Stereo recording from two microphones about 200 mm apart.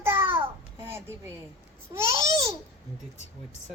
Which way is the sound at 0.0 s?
10° right (ahead or behind).